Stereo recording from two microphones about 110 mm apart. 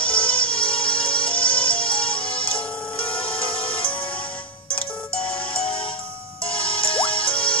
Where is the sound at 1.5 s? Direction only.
50° left (ahead or behind).